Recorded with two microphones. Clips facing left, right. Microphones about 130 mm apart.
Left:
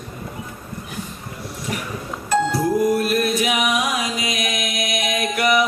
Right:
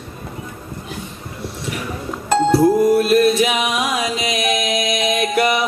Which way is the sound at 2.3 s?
25° right (ahead or behind).